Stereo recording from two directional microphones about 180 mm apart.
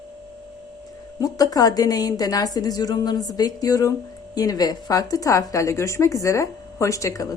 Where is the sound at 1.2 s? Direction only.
20° left (ahead or behind).